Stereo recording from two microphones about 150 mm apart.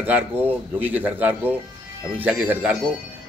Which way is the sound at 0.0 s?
10° right (ahead or behind).